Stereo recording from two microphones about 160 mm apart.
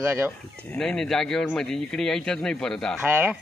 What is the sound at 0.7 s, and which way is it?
Speech, 5° left (ahead or behind).